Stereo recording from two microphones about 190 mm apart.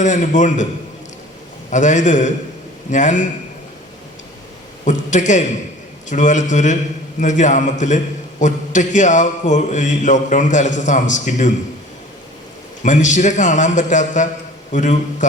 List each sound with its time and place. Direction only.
0.0 s a man's voice: 40° left (ahead or behind)
1.7 s a man's voice: 40° left (ahead or behind)
4.9 s a man's voice: 40° left (ahead or behind)
12.8 s a man's voice: 40° left (ahead or behind)